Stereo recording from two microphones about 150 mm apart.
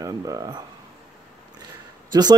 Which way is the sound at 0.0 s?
25° right (ahead or behind).